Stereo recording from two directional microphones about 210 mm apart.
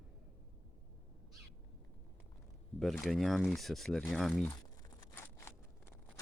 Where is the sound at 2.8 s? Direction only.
Centre (ahead or behind).